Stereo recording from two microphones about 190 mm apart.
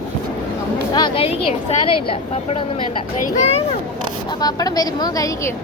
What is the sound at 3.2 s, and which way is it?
Speech, 35° left (ahead or behind).